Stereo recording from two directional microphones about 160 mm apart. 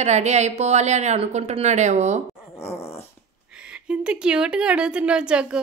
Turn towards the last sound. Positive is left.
turn(degrees=-5)  # may be behind; listen again after turning